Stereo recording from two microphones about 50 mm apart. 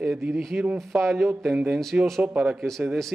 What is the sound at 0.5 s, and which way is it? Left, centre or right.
Speech, right.